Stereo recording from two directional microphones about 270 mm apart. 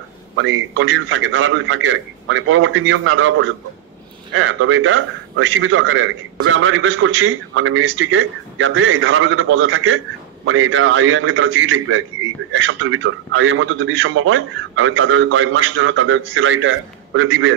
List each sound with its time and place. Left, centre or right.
0.4 s a man's voice: right